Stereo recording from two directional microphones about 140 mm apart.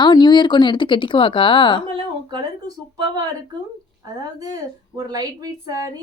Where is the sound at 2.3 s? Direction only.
30° right (ahead or behind).